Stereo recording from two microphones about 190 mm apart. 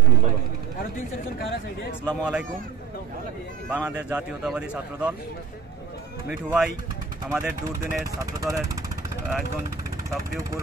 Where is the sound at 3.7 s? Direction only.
5° right (ahead or behind).